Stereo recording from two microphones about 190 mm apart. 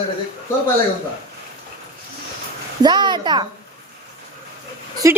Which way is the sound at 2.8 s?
25° right (ahead or behind).